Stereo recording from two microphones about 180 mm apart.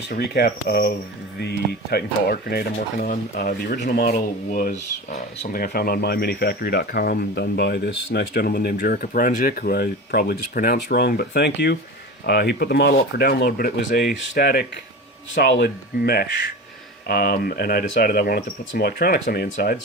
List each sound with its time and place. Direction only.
0.1 s speech: 60° left (ahead or behind)
2.7 s speech: 45° left (ahead or behind)
4.5 s speech: 45° left (ahead or behind)
5.5 s speech: 55° left (ahead or behind)